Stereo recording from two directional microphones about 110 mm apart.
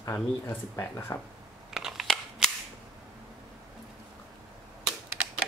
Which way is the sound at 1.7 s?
5° right (ahead or behind).